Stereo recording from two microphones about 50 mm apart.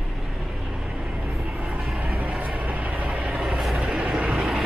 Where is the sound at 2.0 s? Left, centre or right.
Right.